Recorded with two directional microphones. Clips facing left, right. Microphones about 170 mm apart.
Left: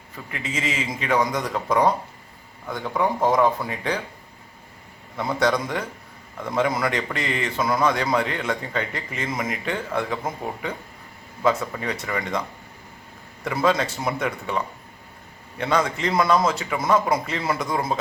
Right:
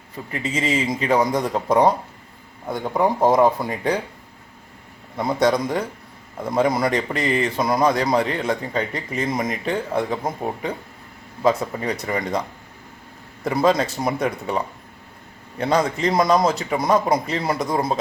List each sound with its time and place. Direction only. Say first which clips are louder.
0.3 s a man's voice: right 5 dB; 35° right (ahead or behind)
5.3 s a man's voice: right 3 dB; 20° right (ahead or behind)
5.5 s a man's voice: right 4 dB; 35° right (ahead or behind)
13.4 s a man's voice: right 3 dB; 35° right (ahead or behind)